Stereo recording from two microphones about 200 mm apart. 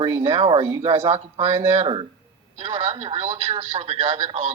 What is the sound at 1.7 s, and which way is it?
Speech, 25° right (ahead or behind).